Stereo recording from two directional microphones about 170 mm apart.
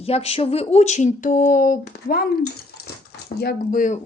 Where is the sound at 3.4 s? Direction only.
70° left (ahead or behind).